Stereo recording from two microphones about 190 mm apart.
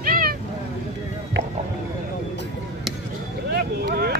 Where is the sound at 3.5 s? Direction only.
55° right (ahead or behind).